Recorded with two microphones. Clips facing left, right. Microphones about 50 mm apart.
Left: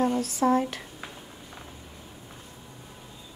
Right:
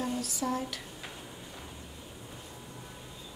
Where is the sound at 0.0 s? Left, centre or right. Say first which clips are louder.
Left 9 dB; left.